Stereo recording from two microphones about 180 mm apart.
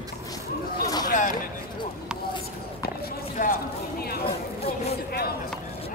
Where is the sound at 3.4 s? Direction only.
55° left (ahead or behind).